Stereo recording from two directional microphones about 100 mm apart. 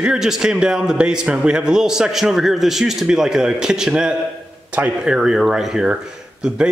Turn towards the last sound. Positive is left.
turn(degrees=-10)  # may be behind; listen again after turning